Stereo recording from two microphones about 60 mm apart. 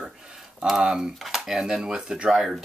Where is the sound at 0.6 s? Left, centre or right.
Centre.